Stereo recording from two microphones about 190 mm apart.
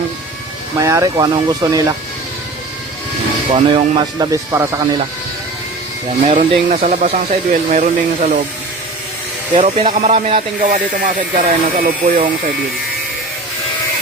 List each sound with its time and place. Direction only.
0.8 s speech: 15° right (ahead or behind)
3.5 s speech: 25° right (ahead or behind)
6.2 s speech: 40° right (ahead or behind)
9.6 s speech: 35° right (ahead or behind)